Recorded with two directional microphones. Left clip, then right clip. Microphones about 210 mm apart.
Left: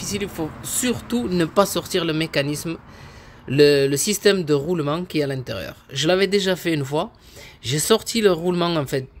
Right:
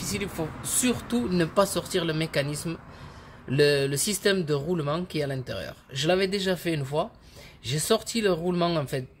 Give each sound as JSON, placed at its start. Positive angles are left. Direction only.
{"t": 0.0, "sound": "speech", "side_deg": 20}